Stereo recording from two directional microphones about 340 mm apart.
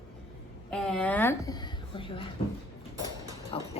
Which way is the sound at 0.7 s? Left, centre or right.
Centre.